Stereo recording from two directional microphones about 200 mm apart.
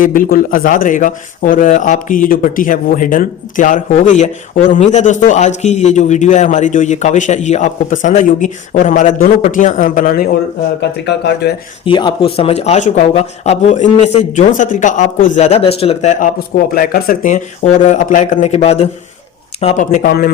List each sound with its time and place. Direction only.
0.0 s speech: 45° left (ahead or behind)
10.8 s speech: 55° left (ahead or behind)
11.9 s speech: 25° left (ahead or behind)
19.9 s a man's voice: 45° left (ahead or behind)